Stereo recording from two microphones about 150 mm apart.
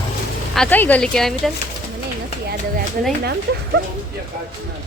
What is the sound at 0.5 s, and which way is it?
Speech, 10° left (ahead or behind).